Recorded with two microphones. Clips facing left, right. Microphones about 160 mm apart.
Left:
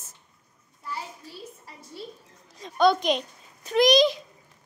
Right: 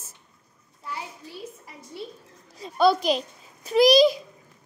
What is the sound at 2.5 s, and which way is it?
A child's voice, 5° right (ahead or behind).